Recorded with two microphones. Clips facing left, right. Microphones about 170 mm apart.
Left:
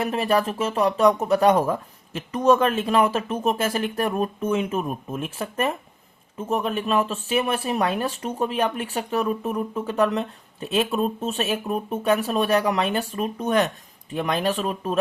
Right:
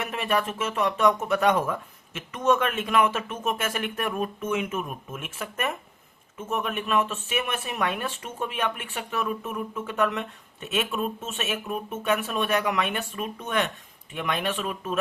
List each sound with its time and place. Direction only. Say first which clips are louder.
0.0 s speech: left 5 dB; 35° left (ahead or behind)